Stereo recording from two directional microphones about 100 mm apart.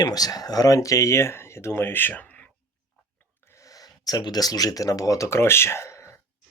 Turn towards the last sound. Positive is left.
turn(degrees=30)  # may be behind; listen again after turning